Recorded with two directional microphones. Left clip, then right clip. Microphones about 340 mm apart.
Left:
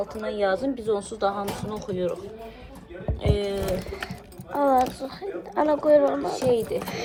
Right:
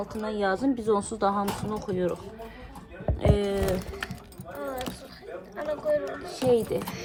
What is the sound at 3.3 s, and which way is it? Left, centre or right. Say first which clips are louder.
Speech: left 1 dB; right.